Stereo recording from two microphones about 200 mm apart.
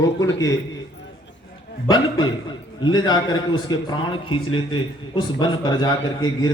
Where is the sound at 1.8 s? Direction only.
20° left (ahead or behind).